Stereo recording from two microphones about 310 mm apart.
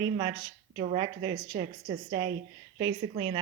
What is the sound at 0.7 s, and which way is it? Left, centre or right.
Speech, centre.